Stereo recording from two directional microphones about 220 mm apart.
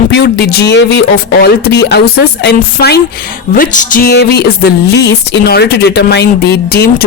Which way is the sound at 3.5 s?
35° left (ahead or behind).